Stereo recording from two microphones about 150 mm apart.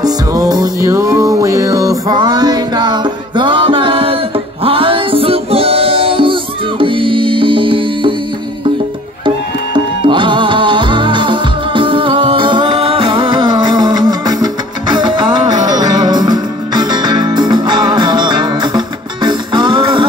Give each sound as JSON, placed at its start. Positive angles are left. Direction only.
{"t": 0.0, "sound": "music", "side_deg": -25}
{"t": 10.0, "sound": "music", "side_deg": -35}